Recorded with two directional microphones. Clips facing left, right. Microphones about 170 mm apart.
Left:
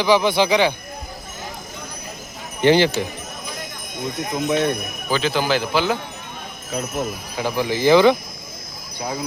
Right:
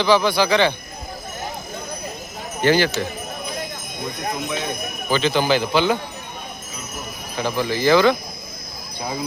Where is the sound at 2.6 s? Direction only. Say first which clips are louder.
Left 3 dB; 20° left (ahead or behind).